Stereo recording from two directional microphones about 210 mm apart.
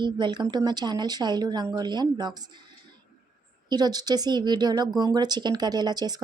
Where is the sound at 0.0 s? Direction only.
20° right (ahead or behind).